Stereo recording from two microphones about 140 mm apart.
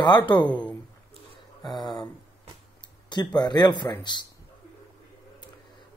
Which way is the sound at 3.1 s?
30° left (ahead or behind).